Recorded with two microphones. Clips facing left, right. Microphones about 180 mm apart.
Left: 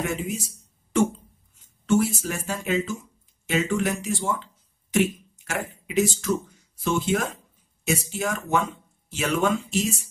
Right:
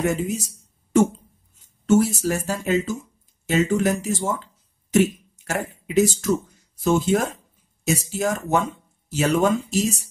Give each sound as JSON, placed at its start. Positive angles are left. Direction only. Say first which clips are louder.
{"t": 0.0, "sound": "speech", "louder": "right 5 dB", "side_deg": -40}
{"t": 1.9, "sound": "speech", "louder": "right 4 dB", "side_deg": -40}
{"t": 4.9, "sound": "a sound", "louder": "right 4 dB", "side_deg": -40}
{"t": 5.9, "sound": "speech", "louder": "right 4 dB", "side_deg": -40}